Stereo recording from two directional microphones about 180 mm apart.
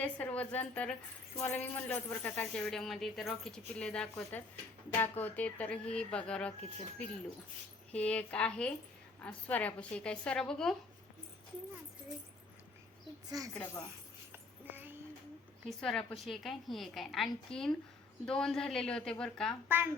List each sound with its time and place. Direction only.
0.0 s speech: 10° left (ahead or behind)
13.3 s speech: 20° right (ahead or behind)
14.3 s a sound: 10° right (ahead or behind)
15.8 s speech: 5° left (ahead or behind)
19.6 s a woman's voice: 10° right (ahead or behind)